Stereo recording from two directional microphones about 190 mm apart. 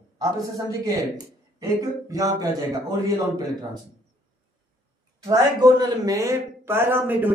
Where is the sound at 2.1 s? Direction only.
20° right (ahead or behind).